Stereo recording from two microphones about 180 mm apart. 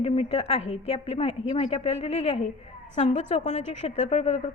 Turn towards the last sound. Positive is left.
turn(degrees=40)  # may be behind; listen again after turning